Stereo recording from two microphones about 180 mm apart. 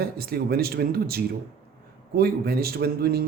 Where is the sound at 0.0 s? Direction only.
60° right (ahead or behind).